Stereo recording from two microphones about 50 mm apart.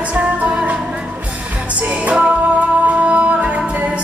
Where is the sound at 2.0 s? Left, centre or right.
Centre.